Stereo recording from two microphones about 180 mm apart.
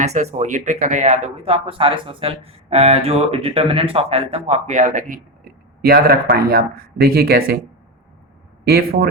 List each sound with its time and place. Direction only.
0.0 s speech: 40° right (ahead or behind); by 7.6 s 60° right (ahead or behind)
8.6 s speech: 60° right (ahead or behind)